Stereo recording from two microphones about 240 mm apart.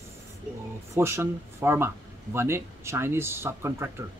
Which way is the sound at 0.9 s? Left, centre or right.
Centre.